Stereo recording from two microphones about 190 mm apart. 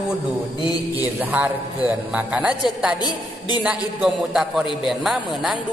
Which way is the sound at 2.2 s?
5° right (ahead or behind).